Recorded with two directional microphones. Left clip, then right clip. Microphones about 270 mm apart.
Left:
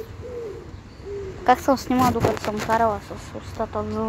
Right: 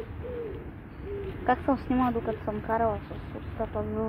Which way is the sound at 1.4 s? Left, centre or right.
Left.